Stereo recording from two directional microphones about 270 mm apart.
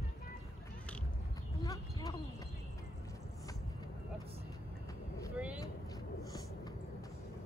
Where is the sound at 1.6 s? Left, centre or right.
Centre.